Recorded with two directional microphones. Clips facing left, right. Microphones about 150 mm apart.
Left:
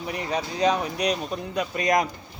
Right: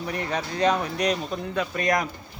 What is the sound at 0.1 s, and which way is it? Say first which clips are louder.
Speech: left 1 dB; 5° left (ahead or behind).